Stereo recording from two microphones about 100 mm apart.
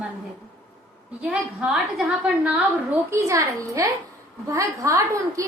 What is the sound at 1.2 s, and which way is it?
A woman's voice, 10° right (ahead or behind).